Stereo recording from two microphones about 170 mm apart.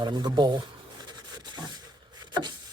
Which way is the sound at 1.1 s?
25° right (ahead or behind).